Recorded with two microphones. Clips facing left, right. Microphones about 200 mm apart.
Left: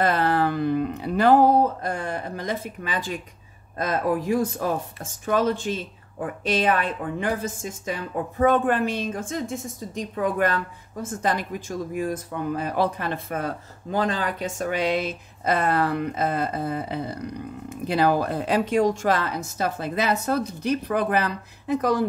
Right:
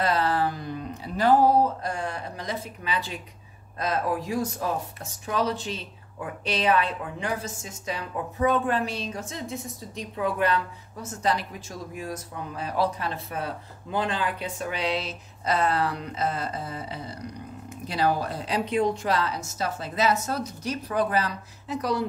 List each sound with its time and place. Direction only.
0.0 s a woman's voice: 55° left (ahead or behind)